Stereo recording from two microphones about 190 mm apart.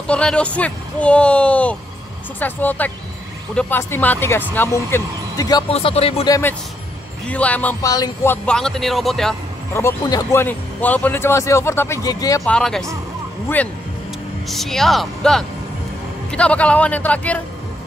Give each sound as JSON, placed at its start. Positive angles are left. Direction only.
{"t": 0.0, "sound": "speech", "side_deg": 5}
{"t": 5.7, "sound": "speech", "side_deg": 30}
{"t": 6.2, "sound": "speech", "side_deg": 15}
{"t": 7.2, "sound": "speech", "side_deg": 5}
{"t": 9.8, "sound": "speech", "side_deg": 15}
{"t": 12.4, "sound": "speech", "side_deg": 5}
{"t": 14.5, "sound": "speech", "side_deg": 0}